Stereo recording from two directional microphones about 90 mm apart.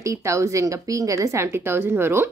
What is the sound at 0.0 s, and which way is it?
A woman's voice, 35° right (ahead or behind).